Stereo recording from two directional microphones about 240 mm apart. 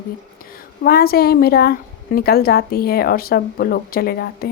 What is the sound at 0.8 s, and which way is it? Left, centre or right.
Speech, left.